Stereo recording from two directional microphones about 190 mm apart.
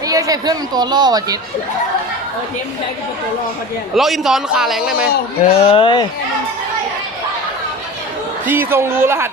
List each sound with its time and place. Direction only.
0.1 s speech: 20° right (ahead or behind)
3.9 s a man's voice: centre (ahead or behind)
5.4 s speech: 30° left (ahead or behind)
8.4 s speech: 10° right (ahead or behind)